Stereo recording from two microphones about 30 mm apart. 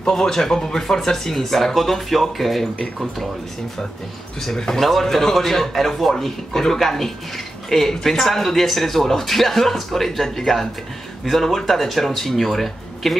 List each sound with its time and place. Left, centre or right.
0.3 s speech: centre
5.0 s speech: centre
6.1 s speech: centre
6.8 s speech: centre